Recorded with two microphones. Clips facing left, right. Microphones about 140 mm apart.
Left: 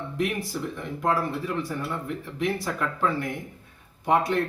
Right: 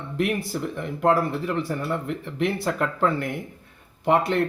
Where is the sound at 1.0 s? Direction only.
65° right (ahead or behind).